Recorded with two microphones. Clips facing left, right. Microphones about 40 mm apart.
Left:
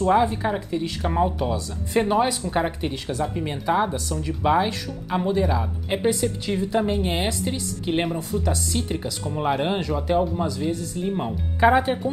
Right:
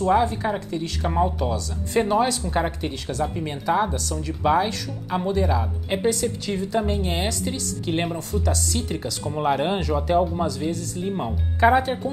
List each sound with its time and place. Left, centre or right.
0.1 s speech: centre
6.0 s speech: centre
9.2 s speech: centre